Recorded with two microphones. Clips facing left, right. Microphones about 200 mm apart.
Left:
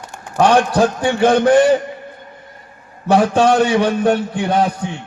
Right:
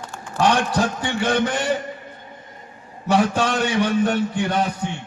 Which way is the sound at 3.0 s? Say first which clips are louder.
Left 6 dB; 60° left (ahead or behind).